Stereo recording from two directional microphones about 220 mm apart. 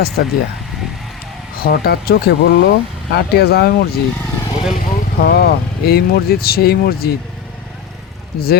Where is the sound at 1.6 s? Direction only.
45° left (ahead or behind).